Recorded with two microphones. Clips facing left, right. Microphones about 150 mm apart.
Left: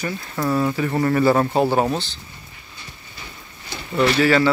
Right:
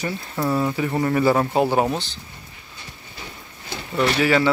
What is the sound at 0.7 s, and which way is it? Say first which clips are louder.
Speech: left 2 dB; 15° right (ahead or behind).